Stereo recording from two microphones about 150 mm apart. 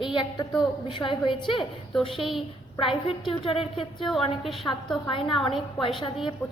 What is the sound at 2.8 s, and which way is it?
A woman's voice, 35° left (ahead or behind).